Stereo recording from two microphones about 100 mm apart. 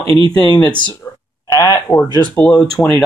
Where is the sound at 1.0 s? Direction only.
30° left (ahead or behind).